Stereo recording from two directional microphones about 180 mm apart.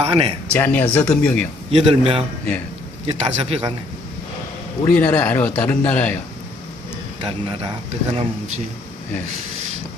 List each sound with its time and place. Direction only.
0.0 s speech: 30° right (ahead or behind)
0.5 s speech: 10° left (ahead or behind)
1.7 s speech: 30° right (ahead or behind)
4.8 s speech: 10° left (ahead or behind)
7.2 s speech: 30° right (ahead or behind)